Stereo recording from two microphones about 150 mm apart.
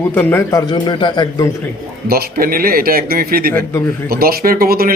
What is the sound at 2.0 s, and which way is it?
Speech, 80° right.